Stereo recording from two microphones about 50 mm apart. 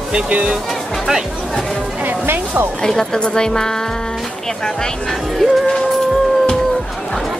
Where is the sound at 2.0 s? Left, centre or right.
Right.